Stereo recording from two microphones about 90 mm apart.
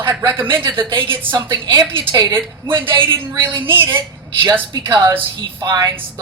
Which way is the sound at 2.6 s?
65° right (ahead or behind).